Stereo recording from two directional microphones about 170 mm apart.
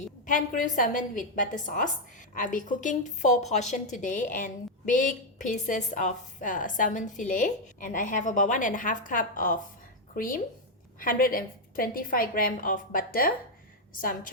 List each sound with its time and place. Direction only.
0.3 s a woman's voice: 50° left (ahead or behind)